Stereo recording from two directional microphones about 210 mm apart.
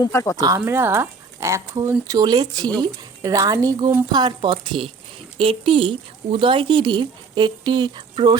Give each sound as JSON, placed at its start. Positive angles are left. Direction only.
{"t": 0.0, "sound": "speech", "side_deg": 15}
{"t": 0.3, "sound": "speech", "side_deg": -15}